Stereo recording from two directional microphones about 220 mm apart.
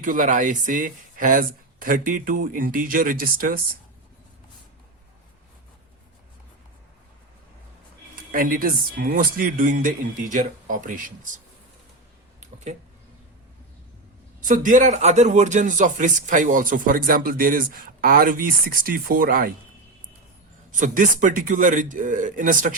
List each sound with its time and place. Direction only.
0.0 s a man's voice: 35° right (ahead or behind)
8.1 s a man's voice: 40° right (ahead or behind)
12.4 s a sound: 30° right (ahead or behind)
14.4 s a man's voice: 35° right (ahead or behind)
20.7 s a man's voice: 35° right (ahead or behind)